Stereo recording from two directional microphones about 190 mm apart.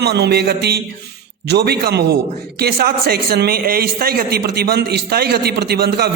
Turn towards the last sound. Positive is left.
turn(degrees=-55)  # may be behind; listen again after turning